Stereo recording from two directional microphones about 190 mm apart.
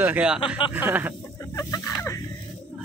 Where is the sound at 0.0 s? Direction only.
5° right (ahead or behind).